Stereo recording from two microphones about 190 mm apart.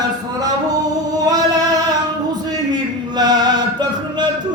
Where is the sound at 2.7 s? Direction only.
20° right (ahead or behind).